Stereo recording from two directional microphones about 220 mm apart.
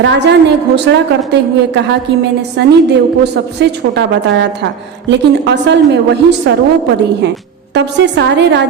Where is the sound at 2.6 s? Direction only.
50° right (ahead or behind).